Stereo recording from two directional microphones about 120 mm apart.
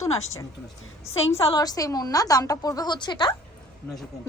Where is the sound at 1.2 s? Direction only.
55° left (ahead or behind).